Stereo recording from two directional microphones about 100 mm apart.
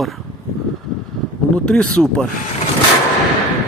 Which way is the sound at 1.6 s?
5° left (ahead or behind).